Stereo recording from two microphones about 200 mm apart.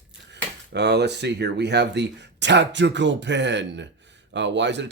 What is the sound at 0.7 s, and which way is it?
Speech, 60° right (ahead or behind).